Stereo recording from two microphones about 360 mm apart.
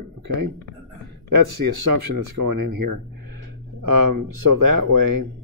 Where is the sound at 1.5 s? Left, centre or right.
Right.